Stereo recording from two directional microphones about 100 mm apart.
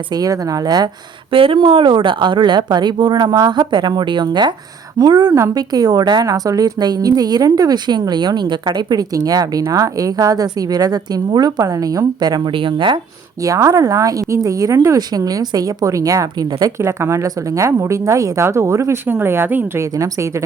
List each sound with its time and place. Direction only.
0.1 s a woman's voice: 40° right (ahead or behind)
1.3 s a woman's voice: 60° right (ahead or behind); by 12.4 s 40° right (ahead or behind)
12.5 s speech: 55° right (ahead or behind)
13.4 s a woman's voice: 35° right (ahead or behind)
16.8 s a woman's voice: 30° right (ahead or behind)